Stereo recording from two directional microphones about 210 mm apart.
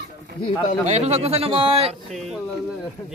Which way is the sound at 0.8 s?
30° right (ahead or behind).